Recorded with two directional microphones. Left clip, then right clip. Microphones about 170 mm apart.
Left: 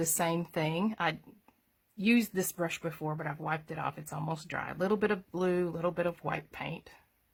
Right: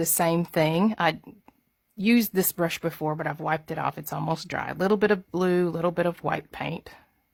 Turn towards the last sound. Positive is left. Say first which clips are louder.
# right 7 dB
turn(degrees=-50)  # may be behind; listen again after turning